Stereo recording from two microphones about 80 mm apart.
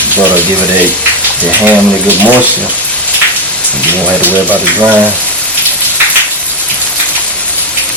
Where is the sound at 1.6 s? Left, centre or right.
Right.